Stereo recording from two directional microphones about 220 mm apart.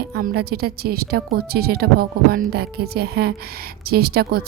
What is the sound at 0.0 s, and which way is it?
A woman's voice, 45° right (ahead or behind).